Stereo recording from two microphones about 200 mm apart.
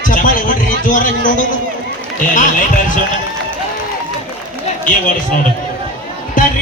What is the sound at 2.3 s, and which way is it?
Speech, 40° left (ahead or behind).